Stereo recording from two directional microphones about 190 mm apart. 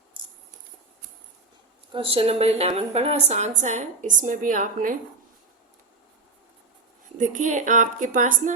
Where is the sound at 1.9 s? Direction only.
30° right (ahead or behind); by 4.9 s 45° right (ahead or behind).